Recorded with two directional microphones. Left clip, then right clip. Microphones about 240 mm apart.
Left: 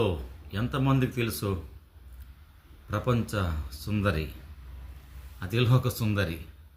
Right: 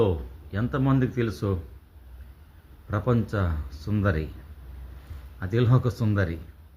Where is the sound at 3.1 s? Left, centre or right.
Centre.